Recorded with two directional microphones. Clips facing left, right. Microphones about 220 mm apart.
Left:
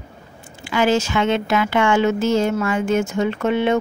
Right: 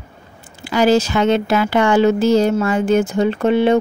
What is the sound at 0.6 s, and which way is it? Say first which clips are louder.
Speech: right 4 dB; 40° right (ahead or behind).